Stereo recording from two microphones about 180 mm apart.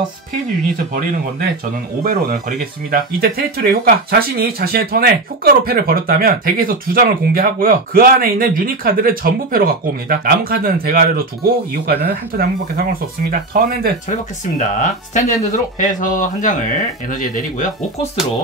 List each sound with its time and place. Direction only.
2.0 s speech: 50° right (ahead or behind)
14.8 s speech: 45° left (ahead or behind)